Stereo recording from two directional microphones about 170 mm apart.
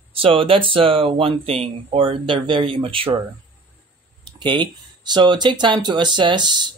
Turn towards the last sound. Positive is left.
turn(degrees=-25)  # may be behind; listen again after turning